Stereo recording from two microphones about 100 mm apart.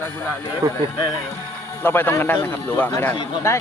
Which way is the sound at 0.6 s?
40° right (ahead or behind).